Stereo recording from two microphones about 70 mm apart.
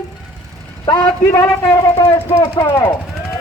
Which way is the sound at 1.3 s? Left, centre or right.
Left.